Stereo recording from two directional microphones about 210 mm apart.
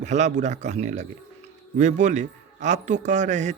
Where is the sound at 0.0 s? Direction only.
35° right (ahead or behind).